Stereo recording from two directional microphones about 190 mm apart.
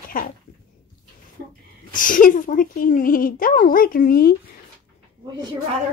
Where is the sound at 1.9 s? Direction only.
45° left (ahead or behind).